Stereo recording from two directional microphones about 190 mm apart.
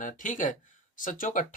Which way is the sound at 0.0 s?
45° left (ahead or behind).